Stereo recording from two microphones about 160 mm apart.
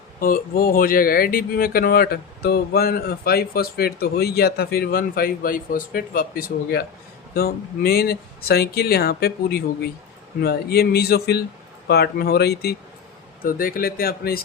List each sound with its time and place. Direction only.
0.2 s a man's voice: 65° left (ahead or behind); by 12.7 s 80° left
13.4 s speech: 60° left (ahead or behind)